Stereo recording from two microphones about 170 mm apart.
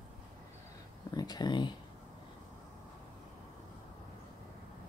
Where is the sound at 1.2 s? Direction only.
25° left (ahead or behind).